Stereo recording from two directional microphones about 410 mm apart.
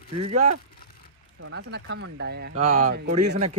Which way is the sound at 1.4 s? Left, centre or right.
Right.